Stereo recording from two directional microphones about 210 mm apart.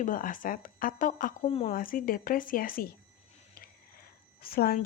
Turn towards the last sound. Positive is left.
turn(degrees=45)  # may be behind; listen again after turning